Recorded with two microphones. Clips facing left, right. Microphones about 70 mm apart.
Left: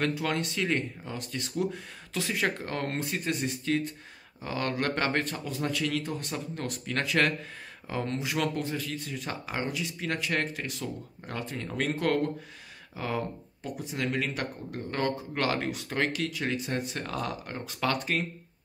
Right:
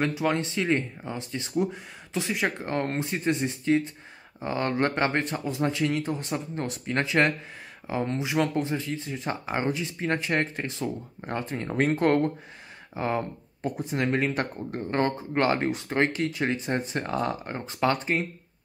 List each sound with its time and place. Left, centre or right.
0.0 s speech: centre
13.6 s speech: right
13.9 s speech: right